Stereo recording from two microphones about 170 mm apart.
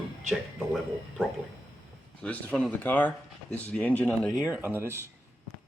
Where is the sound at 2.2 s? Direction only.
5° left (ahead or behind).